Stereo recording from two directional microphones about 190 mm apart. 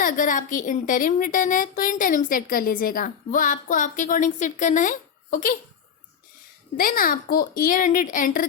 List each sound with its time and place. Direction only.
0.0 s a woman's voice: 45° left (ahead or behind)
6.7 s a woman's voice: 50° left (ahead or behind)